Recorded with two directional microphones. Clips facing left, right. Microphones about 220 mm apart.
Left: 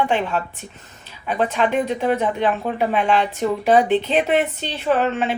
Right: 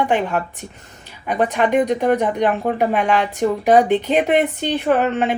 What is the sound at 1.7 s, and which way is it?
Speech, 15° right (ahead or behind).